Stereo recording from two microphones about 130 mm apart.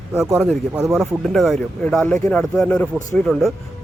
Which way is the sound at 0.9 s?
Centre (ahead or behind).